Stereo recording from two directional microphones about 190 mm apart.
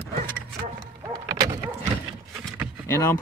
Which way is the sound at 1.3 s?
20° right (ahead or behind).